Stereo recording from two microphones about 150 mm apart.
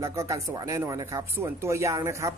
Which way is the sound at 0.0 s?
20° right (ahead or behind).